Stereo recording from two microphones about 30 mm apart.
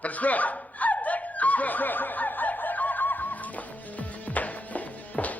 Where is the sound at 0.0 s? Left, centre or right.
Left.